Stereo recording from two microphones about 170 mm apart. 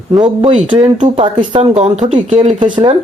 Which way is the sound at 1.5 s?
40° right (ahead or behind).